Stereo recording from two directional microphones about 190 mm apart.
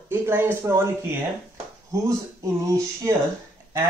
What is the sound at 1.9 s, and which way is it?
Speech, 15° right (ahead or behind).